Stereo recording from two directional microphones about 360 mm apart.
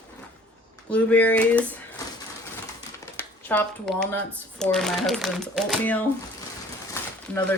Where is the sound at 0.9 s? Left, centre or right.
Centre.